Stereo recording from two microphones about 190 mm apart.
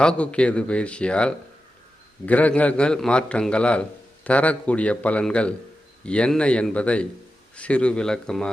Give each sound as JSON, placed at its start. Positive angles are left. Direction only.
{"t": 0.0, "sound": "a man's voice", "side_deg": 5}